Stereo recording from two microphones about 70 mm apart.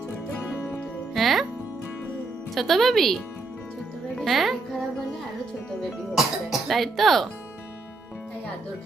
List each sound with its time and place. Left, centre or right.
0.3 s music: left
1.1 s music: centre
2.6 s speech: centre
6.1 s speech: centre